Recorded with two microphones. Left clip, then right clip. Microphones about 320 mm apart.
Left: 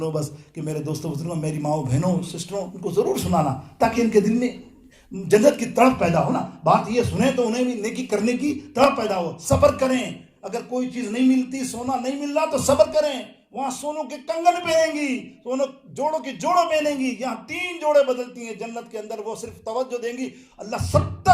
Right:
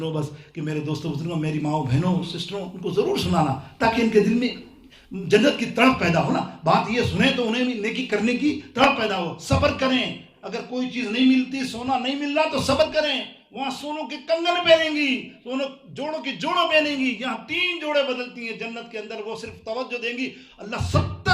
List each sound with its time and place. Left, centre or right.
0.0 s a man's voice: centre